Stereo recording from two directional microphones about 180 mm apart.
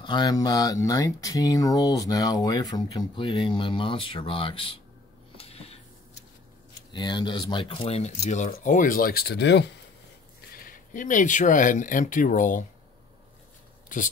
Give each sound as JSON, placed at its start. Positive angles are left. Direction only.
{"t": 0.0, "sound": "speech", "side_deg": 25}
{"t": 5.4, "sound": "a sound", "side_deg": 35}
{"t": 6.9, "sound": "speech", "side_deg": 25}
{"t": 10.5, "sound": "speech", "side_deg": 50}
{"t": 13.8, "sound": "speech", "side_deg": 45}